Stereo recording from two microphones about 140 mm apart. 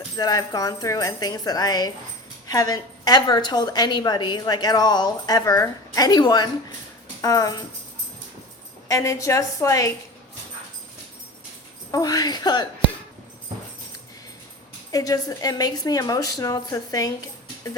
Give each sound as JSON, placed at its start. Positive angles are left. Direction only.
{"t": 0.2, "sound": "a woman's voice", "side_deg": 25}
{"t": 8.9, "sound": "a woman's voice", "side_deg": 20}
{"t": 11.9, "sound": "a woman's voice", "side_deg": 25}
{"t": 14.9, "sound": "a woman's voice", "side_deg": 25}